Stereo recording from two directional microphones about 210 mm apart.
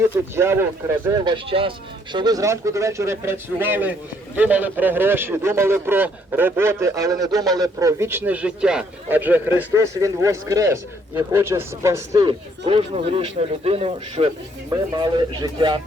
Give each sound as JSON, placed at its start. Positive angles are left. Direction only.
{"t": 0.0, "sound": "a man's voice", "side_deg": -10}